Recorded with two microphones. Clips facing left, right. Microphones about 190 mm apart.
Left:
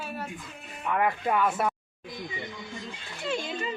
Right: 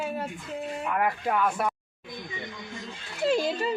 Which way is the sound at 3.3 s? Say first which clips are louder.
Right 6 dB; 35° right (ahead or behind).